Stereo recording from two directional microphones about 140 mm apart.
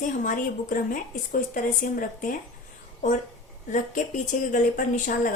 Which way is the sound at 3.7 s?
65° left (ahead or behind).